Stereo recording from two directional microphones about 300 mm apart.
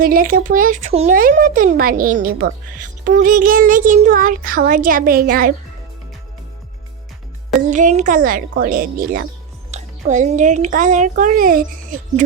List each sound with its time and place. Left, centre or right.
0.0 s speech: right
7.7 s speech: right